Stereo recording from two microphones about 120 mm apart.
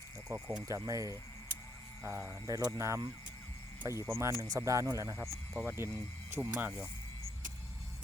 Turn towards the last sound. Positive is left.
turn(degrees=-15)  # may be behind; listen again after turning